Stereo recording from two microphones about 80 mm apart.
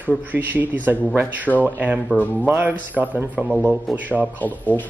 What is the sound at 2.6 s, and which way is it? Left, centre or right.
Speech, right.